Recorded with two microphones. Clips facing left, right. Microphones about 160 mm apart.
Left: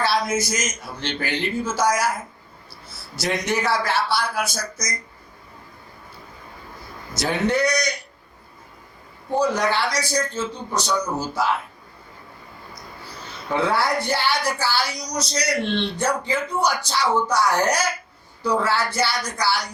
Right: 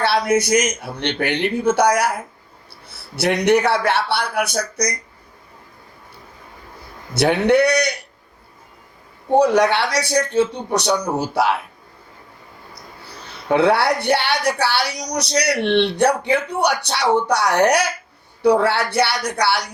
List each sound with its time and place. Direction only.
0.0 s a man's voice: 65° right (ahead or behind)
7.1 s a man's voice: 65° right (ahead or behind)
9.3 s a man's voice: 65° right (ahead or behind)
13.5 s a woman's voice: 70° right (ahead or behind)